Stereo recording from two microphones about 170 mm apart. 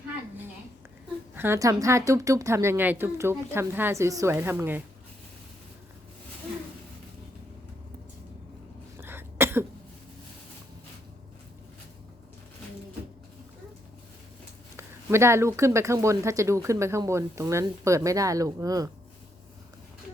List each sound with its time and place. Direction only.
1.4 s speech: 15° right (ahead or behind)
9.0 s cough: 15° right (ahead or behind)
14.8 s speech: 15° right (ahead or behind)